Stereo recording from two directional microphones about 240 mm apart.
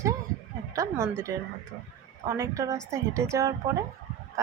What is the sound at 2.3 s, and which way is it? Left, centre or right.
A woman's voice, centre.